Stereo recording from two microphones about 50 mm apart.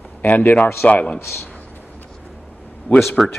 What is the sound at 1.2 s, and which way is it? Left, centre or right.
Speech, left.